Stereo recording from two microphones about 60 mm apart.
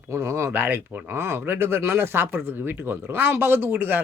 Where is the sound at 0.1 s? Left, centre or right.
Right.